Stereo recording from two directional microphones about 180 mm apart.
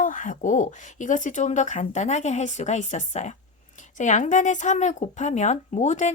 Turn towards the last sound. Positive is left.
turn(degrees=40)  # may be behind; listen again after turning